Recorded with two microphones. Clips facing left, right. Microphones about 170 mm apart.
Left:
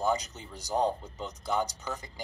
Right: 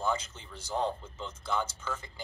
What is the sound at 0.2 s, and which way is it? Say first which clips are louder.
A man's voice: left 3 dB; 40° left (ahead or behind).